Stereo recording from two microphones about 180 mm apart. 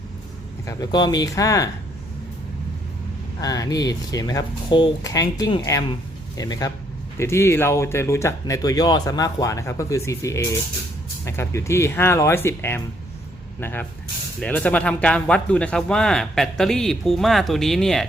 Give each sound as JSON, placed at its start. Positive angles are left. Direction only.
{"t": 0.7, "sound": "speech", "side_deg": 20}
{"t": 3.4, "sound": "speech", "side_deg": 20}